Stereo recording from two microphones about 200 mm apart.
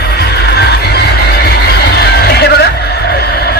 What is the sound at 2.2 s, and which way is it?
Music, 55° left (ahead or behind).